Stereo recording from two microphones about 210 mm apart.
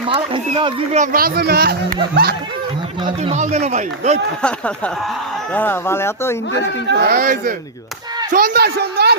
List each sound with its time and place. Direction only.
0.1 s speech: 25° right (ahead or behind)
0.9 s speech: 40° right (ahead or behind)
3.0 s a man's voice: 30° right (ahead or behind)
4.4 s speech: 5° left (ahead or behind)
6.8 s speech: 45° right (ahead or behind)